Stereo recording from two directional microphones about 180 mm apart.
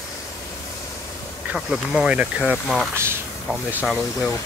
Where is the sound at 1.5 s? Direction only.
Centre (ahead or behind).